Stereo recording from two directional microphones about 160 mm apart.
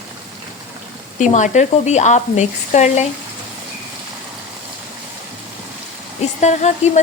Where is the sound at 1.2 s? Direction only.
50° left (ahead or behind).